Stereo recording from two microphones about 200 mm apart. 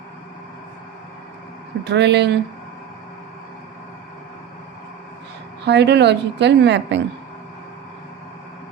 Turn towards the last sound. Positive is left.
turn(degrees=-60)  # may be behind; listen again after turning